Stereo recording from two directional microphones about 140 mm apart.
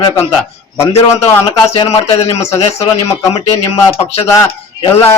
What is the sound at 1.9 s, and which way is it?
Speech, 45° left (ahead or behind).